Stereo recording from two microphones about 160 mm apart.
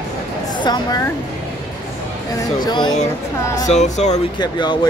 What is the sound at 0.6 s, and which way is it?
Speech, 25° left (ahead or behind).